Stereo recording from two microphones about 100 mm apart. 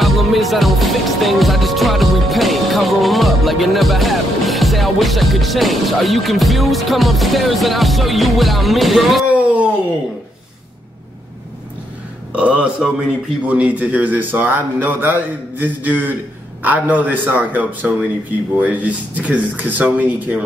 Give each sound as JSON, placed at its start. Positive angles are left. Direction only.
{"t": 0.0, "sound": "music", "side_deg": 0}
{"t": 9.3, "sound": "a sound", "side_deg": -15}
{"t": 12.3, "sound": "a man's voice", "side_deg": -10}